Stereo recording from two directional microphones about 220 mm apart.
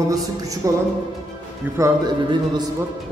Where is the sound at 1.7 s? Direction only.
15° right (ahead or behind).